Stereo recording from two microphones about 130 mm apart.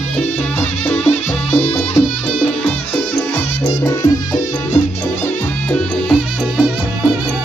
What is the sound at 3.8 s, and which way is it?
Music, 25° left (ahead or behind).